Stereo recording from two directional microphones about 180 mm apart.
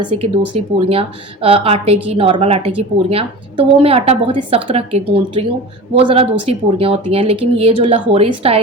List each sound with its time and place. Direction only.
0.8 s a woman's voice: 30° right (ahead or behind)